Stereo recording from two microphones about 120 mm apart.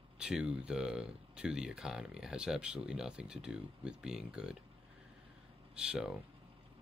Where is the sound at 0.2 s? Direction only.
5° right (ahead or behind).